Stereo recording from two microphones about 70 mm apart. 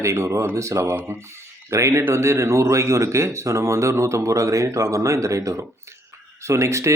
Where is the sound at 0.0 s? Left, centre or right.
Right.